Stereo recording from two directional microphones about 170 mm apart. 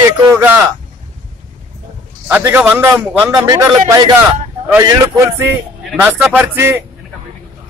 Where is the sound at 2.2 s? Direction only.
15° right (ahead or behind).